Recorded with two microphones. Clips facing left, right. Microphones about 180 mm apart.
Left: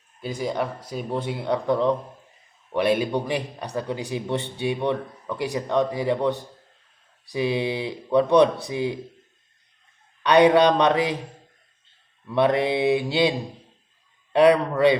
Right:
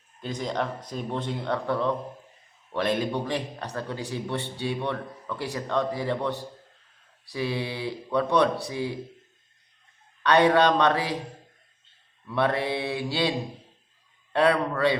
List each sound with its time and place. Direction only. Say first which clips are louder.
0.2 s speech: left 3 dB; 10° left (ahead or behind)
10.2 s speech: left 4 dB; 15° left (ahead or behind)
12.3 s speech: left 5 dB; 20° left (ahead or behind)
14.3 s speech: left 5 dB; 15° left (ahead or behind)